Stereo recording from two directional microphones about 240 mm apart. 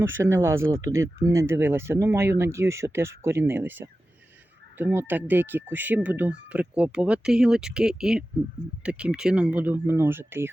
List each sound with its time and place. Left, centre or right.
0.0 s speech: centre